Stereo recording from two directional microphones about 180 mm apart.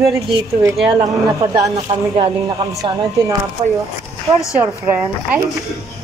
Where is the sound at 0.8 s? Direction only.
25° right (ahead or behind).